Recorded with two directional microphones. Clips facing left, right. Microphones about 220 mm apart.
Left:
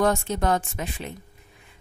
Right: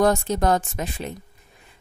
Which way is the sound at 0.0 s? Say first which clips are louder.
Right 3 dB; 40° right (ahead or behind).